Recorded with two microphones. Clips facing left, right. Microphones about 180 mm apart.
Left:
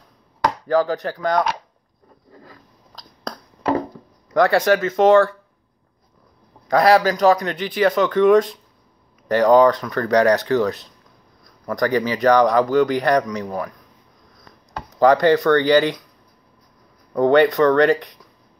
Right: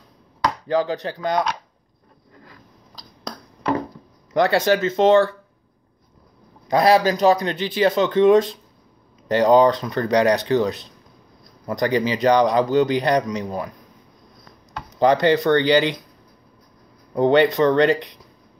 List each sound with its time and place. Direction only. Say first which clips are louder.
0.7 s speech: left 3 dB; 20° right (ahead or behind)
4.3 s speech: left 2 dB; 25° right (ahead or behind)
6.7 s speech: left 1 dB; 25° right (ahead or behind)
15.0 s speech: left 2 dB; 20° right (ahead or behind)
17.1 s speech: left 1 dB; 20° right (ahead or behind)